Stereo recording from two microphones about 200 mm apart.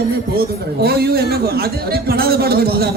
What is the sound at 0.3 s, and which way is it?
Speech, 50° right (ahead or behind).